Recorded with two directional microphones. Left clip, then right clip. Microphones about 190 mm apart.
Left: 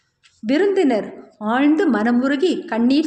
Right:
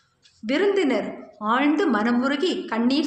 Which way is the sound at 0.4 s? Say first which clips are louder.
Left 4 dB; 45° left (ahead or behind).